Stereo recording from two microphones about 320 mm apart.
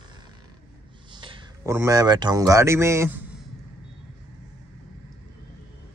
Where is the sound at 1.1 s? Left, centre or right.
Centre.